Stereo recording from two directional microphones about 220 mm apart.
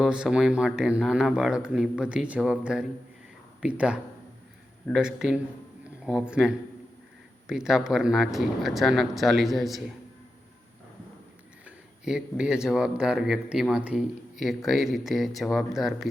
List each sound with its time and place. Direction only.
0.0 s speech: 5° right (ahead or behind)
5.8 s a sound: 5° right (ahead or behind)
7.4 s speech: 5° right (ahead or behind)
11.6 s speech: 5° right (ahead or behind)